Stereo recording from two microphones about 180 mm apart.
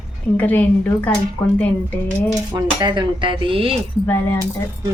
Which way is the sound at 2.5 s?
25° right (ahead or behind).